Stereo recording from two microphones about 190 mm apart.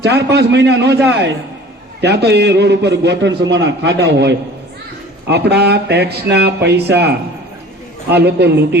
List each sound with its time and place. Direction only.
0.0 s a man's voice: 65° right (ahead or behind)